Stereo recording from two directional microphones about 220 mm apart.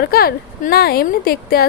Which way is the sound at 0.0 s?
45° left (ahead or behind).